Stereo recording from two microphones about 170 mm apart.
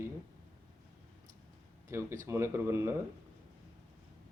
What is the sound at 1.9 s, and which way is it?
A man's voice, 15° right (ahead or behind).